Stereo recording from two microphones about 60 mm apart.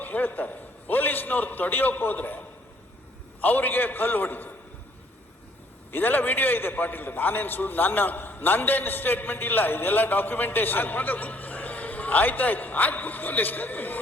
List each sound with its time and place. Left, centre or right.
0.0 s a man's voice: left
3.4 s a man's voice: left
5.9 s a man's voice: left